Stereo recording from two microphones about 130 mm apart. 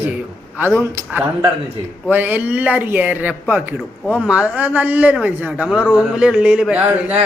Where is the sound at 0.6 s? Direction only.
15° right (ahead or behind).